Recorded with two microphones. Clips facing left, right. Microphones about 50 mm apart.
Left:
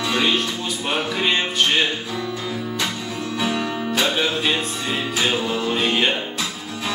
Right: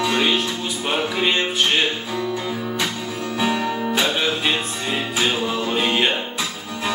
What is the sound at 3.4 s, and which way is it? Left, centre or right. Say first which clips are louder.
Music: right 3 dB; right.